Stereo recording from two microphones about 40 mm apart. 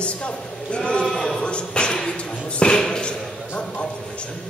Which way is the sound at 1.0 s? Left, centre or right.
Centre.